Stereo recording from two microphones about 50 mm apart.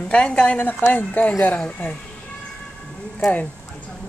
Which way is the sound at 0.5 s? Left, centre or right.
Left.